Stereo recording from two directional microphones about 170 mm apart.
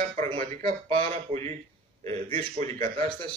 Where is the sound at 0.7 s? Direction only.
35° right (ahead or behind).